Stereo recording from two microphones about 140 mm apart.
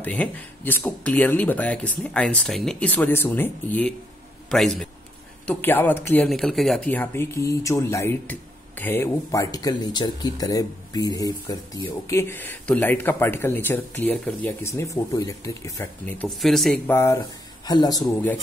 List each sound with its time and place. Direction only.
0.0 s speech: 10° left (ahead or behind)
4.5 s speech: centre (ahead or behind)
5.5 s speech: 15° left (ahead or behind)
6.9 s speech: 15° left (ahead or behind)
16.3 s speech: centre (ahead or behind)
17.6 s speech: 30° left (ahead or behind)